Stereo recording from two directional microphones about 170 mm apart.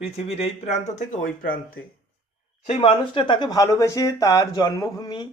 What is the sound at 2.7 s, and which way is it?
Speech, 35° left (ahead or behind).